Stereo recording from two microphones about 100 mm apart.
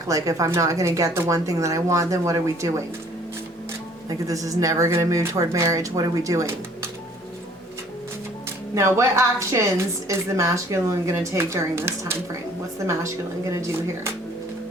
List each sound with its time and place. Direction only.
0.1 s a woman's voice: 35° right (ahead or behind)
4.1 s a woman's voice: 35° right (ahead or behind)
8.7 s a woman's voice: 30° right (ahead or behind)
13.5 s a woman's voice: 30° right (ahead or behind)